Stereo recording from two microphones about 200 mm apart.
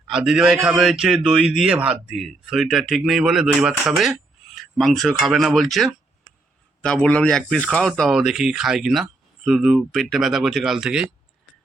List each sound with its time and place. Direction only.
0.1 s a man's voice: 5° right (ahead or behind)